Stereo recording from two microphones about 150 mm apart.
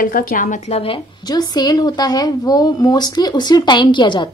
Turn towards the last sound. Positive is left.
turn(degrees=30)  # may be behind; listen again after turning